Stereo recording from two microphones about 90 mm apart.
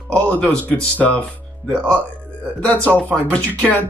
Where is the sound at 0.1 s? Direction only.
10° left (ahead or behind).